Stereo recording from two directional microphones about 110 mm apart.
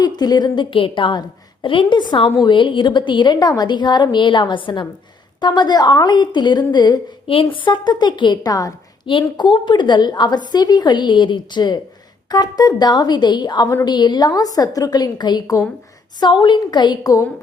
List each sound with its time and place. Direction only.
0.0 s a woman's voice: 40° left (ahead or behind)
7.3 s a woman's voice: 55° left (ahead or behind); by 8.7 s 35° left (ahead or behind)
9.0 s a woman's voice: 50° left (ahead or behind); by 17.2 s 30° left (ahead or behind)